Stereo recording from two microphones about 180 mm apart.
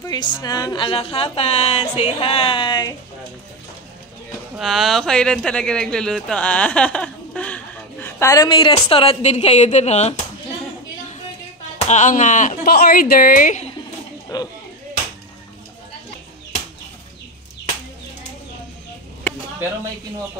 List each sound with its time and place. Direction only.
0.0 s a woman's voice: 25° left (ahead or behind)
4.6 s speech: centre (ahead or behind); by 10.2 s 40° left (ahead or behind)
11.9 s speech: 45° left (ahead or behind)
14.3 s a woman's voice: 20° left (ahead or behind)